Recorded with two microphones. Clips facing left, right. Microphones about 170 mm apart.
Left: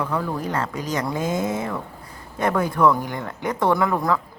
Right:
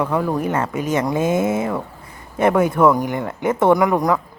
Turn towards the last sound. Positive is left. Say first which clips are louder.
# right 5 dB
turn(degrees=-15)  # may be behind; listen again after turning